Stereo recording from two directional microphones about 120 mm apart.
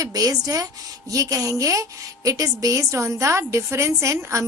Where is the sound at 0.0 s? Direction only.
30° right (ahead or behind).